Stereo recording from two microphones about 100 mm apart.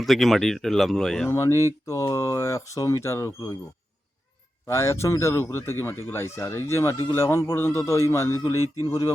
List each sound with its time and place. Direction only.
0.0 s speech: centre (ahead or behind)
1.3 s speech: 30° left (ahead or behind)
4.6 s speech: 25° left (ahead or behind)